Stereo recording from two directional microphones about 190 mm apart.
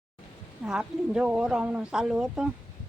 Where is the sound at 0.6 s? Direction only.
5° right (ahead or behind).